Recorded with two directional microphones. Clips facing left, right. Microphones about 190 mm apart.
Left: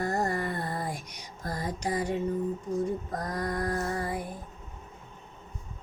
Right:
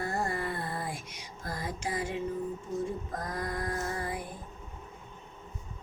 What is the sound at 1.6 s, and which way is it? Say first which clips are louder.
Music: left 4 dB; 40° left (ahead or behind).